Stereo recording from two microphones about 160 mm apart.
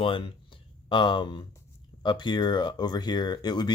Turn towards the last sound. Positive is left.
turn(degrees=25)  # may be behind; listen again after turning